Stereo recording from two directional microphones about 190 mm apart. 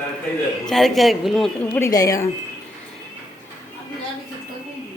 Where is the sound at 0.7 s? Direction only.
Centre (ahead or behind); by 2.3 s 15° left (ahead or behind).